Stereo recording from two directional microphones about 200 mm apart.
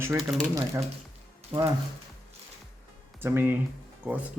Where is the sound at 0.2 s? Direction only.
Centre (ahead or behind).